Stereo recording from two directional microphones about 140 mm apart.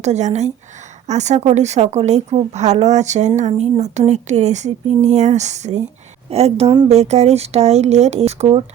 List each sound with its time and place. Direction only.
0.0 s a woman's voice: 55° right (ahead or behind)